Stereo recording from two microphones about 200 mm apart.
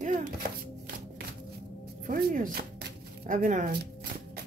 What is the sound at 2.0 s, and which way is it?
Speech, 40° right (ahead or behind).